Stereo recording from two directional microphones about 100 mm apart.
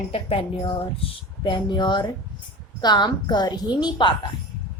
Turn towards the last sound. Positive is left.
turn(degrees=50)  # may be behind; listen again after turning